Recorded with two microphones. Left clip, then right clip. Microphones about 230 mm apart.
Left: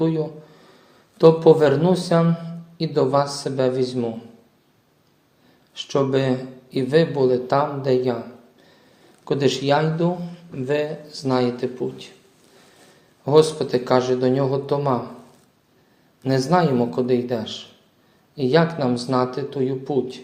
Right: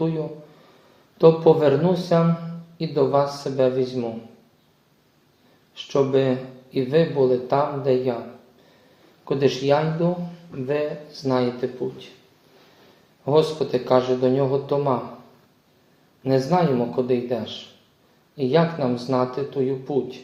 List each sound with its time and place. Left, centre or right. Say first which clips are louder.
0.0 s a man's voice: left 3 dB; left
5.7 s a man's voice: right 1 dB; left
9.2 s a man's voice: even; left
13.2 s a man's voice: left 3 dB; left
16.2 s a man's voice: left 1 dB; left